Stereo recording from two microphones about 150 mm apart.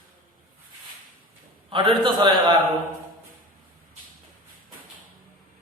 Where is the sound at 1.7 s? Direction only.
35° right (ahead or behind).